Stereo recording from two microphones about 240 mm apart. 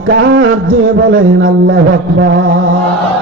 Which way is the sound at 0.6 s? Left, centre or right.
Right.